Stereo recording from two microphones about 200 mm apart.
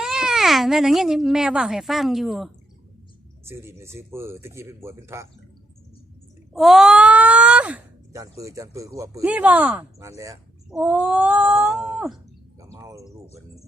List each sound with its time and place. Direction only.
0.0 s speech: centre (ahead or behind)
3.4 s speech: 10° right (ahead or behind)
6.5 s speech: centre (ahead or behind)
12.5 s bird: 15° right (ahead or behind)